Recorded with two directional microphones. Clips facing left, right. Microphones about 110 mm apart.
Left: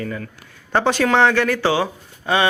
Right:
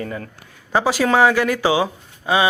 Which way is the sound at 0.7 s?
5° right (ahead or behind).